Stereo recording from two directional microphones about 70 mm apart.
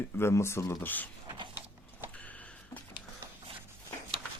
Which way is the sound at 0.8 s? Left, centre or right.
Left.